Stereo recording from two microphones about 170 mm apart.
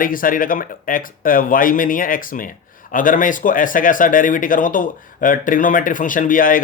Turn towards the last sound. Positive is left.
turn(degrees=55)  # may be behind; listen again after turning